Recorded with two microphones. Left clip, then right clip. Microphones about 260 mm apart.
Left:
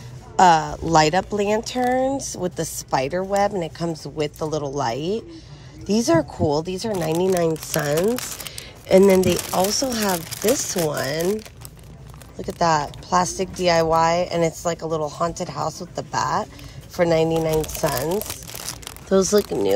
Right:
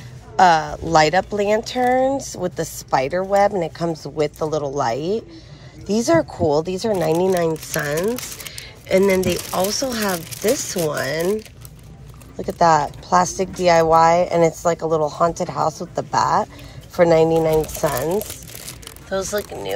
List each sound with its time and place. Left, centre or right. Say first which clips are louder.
0.4 s a woman's voice: right 1 dB; centre
19.0 s speech: left 5 dB; left